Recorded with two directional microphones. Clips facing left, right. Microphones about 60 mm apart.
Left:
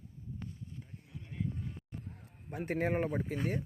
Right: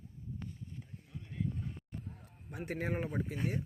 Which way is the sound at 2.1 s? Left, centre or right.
Left.